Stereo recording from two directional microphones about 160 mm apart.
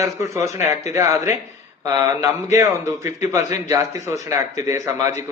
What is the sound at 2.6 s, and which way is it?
Speech, 20° right (ahead or behind).